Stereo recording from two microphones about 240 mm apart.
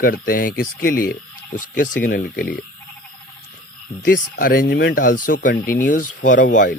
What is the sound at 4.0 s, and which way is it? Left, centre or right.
Speech, left.